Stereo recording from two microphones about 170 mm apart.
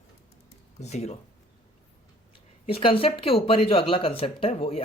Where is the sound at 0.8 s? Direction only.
40° left (ahead or behind).